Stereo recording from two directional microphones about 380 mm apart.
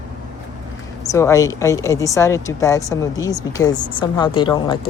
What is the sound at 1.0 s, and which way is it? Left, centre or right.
Speech, centre.